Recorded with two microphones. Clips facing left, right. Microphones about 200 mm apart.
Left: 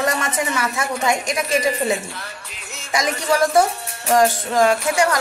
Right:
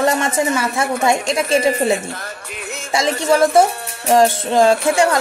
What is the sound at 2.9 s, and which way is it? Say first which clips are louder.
A man's voice: right 4 dB; 25° right (ahead or behind).